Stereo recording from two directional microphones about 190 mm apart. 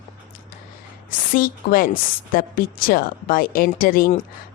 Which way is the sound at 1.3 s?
50° left (ahead or behind).